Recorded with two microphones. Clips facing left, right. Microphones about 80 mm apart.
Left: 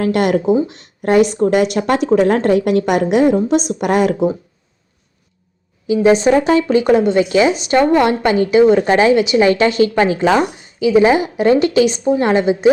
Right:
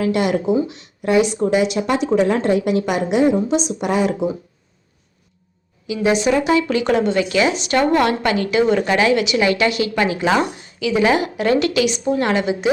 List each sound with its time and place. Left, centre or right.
0.0 s a woman's voice: left
5.9 s speech: left